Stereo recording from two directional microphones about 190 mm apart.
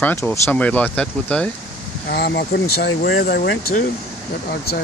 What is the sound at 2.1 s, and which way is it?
Speech, 60° left (ahead or behind).